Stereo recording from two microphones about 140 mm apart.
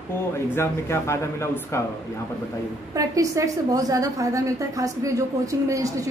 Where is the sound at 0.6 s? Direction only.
20° left (ahead or behind).